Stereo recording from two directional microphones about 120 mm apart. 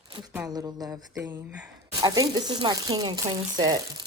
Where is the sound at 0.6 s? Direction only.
25° right (ahead or behind).